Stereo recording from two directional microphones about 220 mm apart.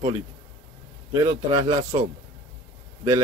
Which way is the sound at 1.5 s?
15° right (ahead or behind).